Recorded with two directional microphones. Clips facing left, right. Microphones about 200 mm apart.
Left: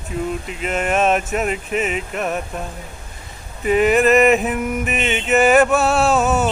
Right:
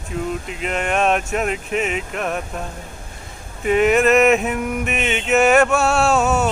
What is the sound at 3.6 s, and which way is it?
Mantra, centre (ahead or behind).